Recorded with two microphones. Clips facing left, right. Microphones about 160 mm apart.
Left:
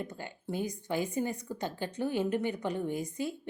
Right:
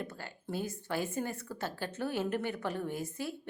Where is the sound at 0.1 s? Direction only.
15° left (ahead or behind).